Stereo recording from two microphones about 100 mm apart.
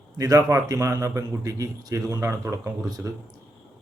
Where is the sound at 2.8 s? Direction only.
40° right (ahead or behind).